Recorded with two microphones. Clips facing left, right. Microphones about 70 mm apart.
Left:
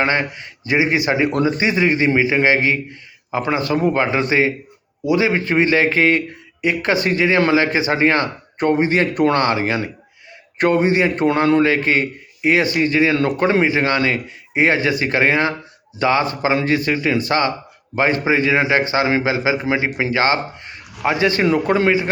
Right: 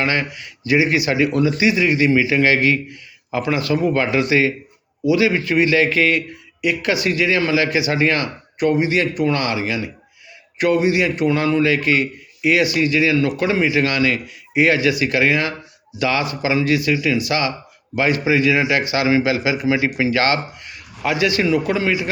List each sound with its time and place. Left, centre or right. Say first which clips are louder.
0.0 s a man's voice: left 2 dB; left